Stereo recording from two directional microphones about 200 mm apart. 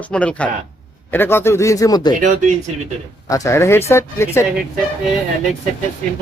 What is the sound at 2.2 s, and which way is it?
Speech, 40° right (ahead or behind).